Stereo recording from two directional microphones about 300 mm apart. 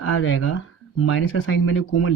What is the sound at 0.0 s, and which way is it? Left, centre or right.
Speech, left.